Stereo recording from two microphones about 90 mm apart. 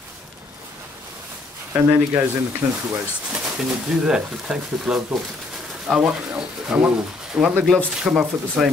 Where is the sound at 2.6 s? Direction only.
30° right (ahead or behind).